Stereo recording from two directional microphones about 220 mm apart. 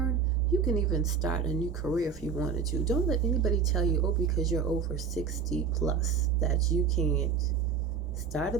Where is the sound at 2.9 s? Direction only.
Centre (ahead or behind).